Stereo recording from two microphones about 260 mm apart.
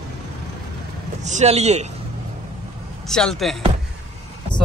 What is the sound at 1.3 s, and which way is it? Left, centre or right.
Speech, right.